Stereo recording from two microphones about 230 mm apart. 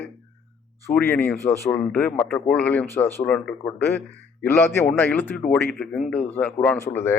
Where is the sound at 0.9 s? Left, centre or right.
Centre.